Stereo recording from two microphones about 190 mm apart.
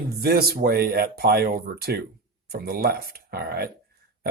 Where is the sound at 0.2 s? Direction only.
55° right (ahead or behind).